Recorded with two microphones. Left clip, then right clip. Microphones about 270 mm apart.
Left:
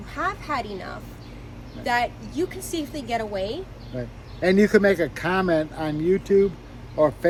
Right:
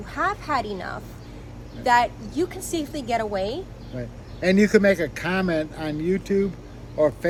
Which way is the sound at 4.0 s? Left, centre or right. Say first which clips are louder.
Left 2 dB; centre.